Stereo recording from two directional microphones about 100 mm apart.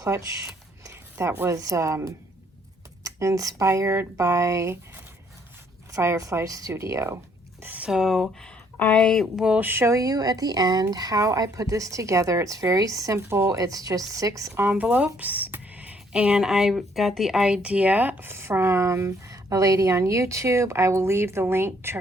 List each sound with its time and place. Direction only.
0.0 s a woman's voice: 30° right (ahead or behind)
5.9 s a woman's voice: 30° right (ahead or behind)
7.6 s a sound: 15° right (ahead or behind)
7.9 s speech: 5° right (ahead or behind)
9.3 s speech: 5° right (ahead or behind)
9.6 s a woman's voice: 20° right (ahead or behind)